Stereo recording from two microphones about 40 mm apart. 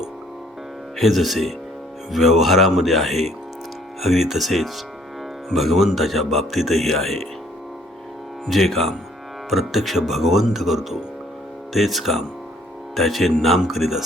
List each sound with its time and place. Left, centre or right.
0.9 s speech: centre
8.4 s speech: centre